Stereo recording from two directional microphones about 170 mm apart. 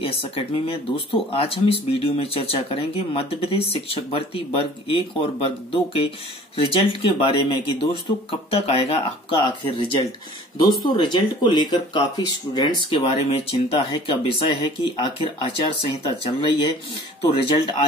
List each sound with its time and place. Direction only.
0.0 s speech: 30° left (ahead or behind)
11.0 s speech: 25° left (ahead or behind)
17.6 s speech: 30° left (ahead or behind)